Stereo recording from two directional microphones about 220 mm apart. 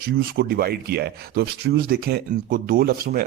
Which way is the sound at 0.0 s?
45° right (ahead or behind).